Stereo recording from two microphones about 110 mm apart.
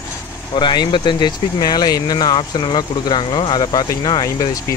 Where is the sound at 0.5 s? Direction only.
45° left (ahead or behind).